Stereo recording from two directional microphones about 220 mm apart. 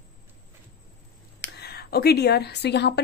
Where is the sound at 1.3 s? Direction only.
50° left (ahead or behind).